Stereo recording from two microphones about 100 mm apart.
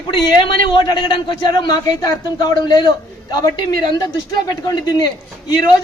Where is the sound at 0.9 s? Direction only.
55° left (ahead or behind).